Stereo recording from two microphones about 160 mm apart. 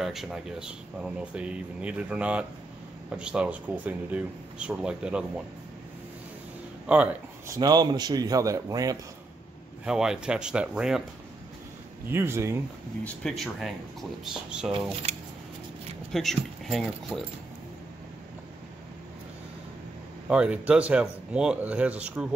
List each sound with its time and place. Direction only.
0.0 s speech: centre (ahead or behind)
6.9 s speech: 5° right (ahead or behind)
7.4 s speech: 20° right (ahead or behind)
9.8 s speech: 5° right (ahead or behind)
12.1 s speech: 15° right (ahead or behind)
13.0 s speech: 5° left (ahead or behind)
16.1 s speech: centre (ahead or behind)
20.2 s speech: 5° right (ahead or behind)